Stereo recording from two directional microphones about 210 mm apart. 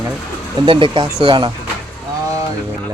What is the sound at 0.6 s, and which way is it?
Speech, 25° right (ahead or behind).